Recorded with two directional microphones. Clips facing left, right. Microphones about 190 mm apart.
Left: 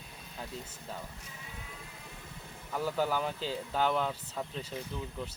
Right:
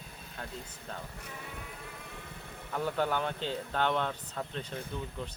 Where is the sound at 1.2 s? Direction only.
60° right (ahead or behind).